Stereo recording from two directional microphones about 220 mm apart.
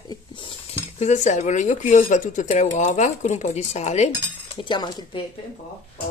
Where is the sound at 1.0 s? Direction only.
30° left (ahead or behind).